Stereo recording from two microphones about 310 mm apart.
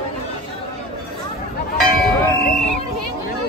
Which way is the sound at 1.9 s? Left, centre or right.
Left.